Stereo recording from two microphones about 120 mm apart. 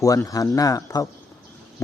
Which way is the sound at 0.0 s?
30° left (ahead or behind).